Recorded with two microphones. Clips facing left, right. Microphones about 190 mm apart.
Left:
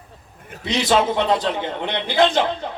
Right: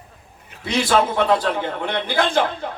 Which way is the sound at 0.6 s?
20° left (ahead or behind).